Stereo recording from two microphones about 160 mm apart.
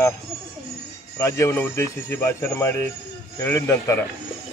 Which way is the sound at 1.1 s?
15° left (ahead or behind).